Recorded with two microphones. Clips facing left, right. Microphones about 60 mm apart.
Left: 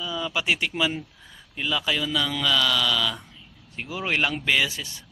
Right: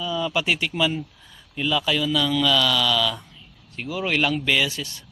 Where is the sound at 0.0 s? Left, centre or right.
Centre.